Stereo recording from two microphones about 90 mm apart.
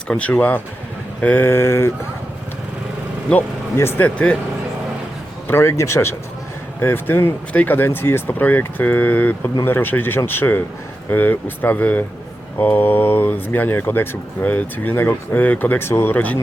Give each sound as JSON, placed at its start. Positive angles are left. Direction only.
{"t": 0.1, "sound": "speech", "side_deg": 15}
{"t": 3.8, "sound": "speech", "side_deg": 25}
{"t": 5.5, "sound": "speech", "side_deg": 30}